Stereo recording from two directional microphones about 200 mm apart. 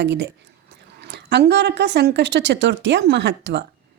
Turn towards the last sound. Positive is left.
turn(degrees=-60)  # may be behind; listen again after turning